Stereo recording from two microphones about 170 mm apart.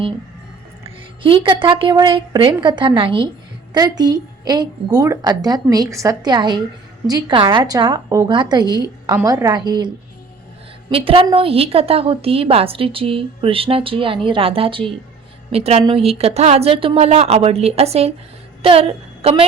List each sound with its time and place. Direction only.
0.9 s a woman's voice: 30° right (ahead or behind)